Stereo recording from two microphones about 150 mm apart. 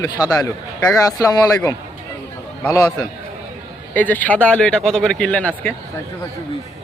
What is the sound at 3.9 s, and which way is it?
A man's voice, 10° left (ahead or behind).